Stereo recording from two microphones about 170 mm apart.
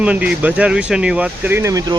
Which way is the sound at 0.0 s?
5° right (ahead or behind).